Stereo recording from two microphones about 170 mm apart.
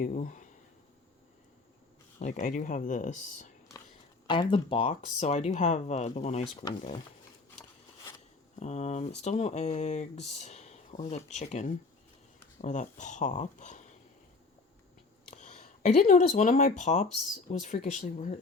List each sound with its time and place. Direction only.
0.0 s speech: 50° left (ahead or behind)
2.1 s speech: 45° left (ahead or behind)
4.3 s speech: 30° left (ahead or behind)
6.6 s speech: 30° left (ahead or behind)
8.5 s speech: 40° left (ahead or behind)
15.3 s speech: 45° left (ahead or behind)